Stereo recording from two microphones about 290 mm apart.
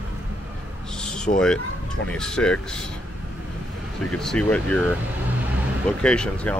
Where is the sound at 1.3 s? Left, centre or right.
Left.